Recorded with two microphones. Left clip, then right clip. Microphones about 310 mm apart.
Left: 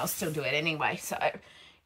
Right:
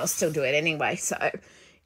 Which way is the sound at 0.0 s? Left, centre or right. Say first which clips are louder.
Right 7 dB; centre.